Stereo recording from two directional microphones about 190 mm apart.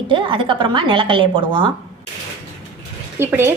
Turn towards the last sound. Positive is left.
turn(degrees=-10)  # may be behind; listen again after turning